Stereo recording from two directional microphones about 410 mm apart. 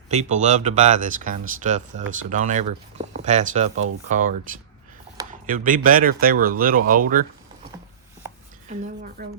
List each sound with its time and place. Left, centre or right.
0.1 s speech: centre
8.7 s speech: right